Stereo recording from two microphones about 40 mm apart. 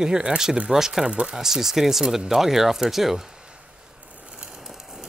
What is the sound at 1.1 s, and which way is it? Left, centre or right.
Speech, right.